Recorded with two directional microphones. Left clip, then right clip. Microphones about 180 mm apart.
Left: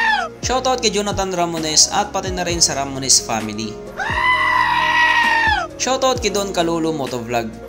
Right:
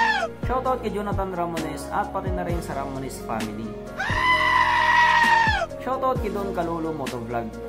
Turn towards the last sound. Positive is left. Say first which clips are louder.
# left 8 dB
turn(degrees=30)  # may be behind; listen again after turning